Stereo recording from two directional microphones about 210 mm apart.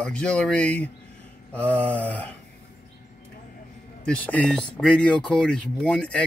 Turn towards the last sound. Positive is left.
turn(degrees=5)  # may be behind; listen again after turning